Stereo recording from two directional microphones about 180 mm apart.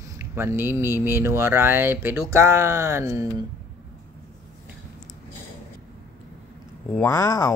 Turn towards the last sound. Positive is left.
turn(degrees=15)  # may be behind; listen again after turning